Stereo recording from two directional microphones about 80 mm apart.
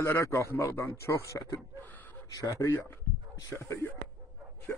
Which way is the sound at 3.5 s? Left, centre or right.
Centre.